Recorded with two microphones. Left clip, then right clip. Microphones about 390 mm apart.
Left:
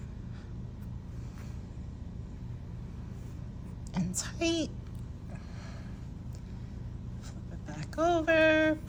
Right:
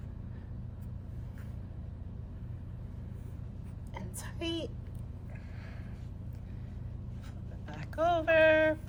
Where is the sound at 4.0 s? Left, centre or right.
Centre.